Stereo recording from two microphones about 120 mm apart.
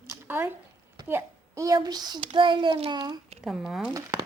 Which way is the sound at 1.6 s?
35° right (ahead or behind).